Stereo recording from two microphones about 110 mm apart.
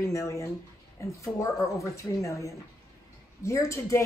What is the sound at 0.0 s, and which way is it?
Speech, 30° left (ahead or behind).